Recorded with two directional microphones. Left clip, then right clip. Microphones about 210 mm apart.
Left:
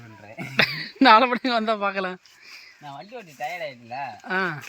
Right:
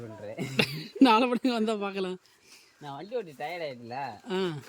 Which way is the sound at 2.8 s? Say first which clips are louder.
Right 4 dB; 15° right (ahead or behind).